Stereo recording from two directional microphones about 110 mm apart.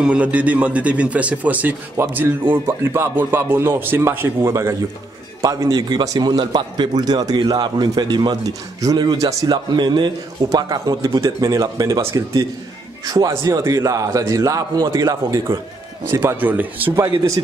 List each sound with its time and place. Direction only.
0.0 s a man's voice: 10° right (ahead or behind); by 9.6 s 30° right (ahead or behind)
9.8 s a man's voice: 45° right (ahead or behind)
13.3 s a man's voice: 25° right (ahead or behind)
16.1 s a man's voice: 25° right (ahead or behind)